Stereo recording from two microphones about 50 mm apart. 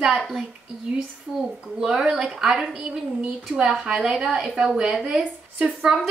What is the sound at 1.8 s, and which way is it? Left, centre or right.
A woman's voice, centre.